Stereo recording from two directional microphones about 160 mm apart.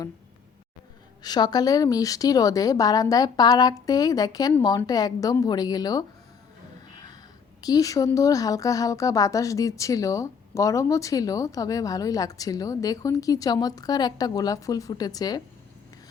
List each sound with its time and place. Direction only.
1.2 s speech: 25° left (ahead or behind)
6.9 s a sound: 25° left (ahead or behind)
7.6 s speech: 25° left (ahead or behind)